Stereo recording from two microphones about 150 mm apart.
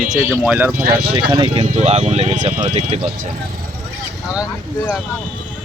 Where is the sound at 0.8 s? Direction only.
90° right.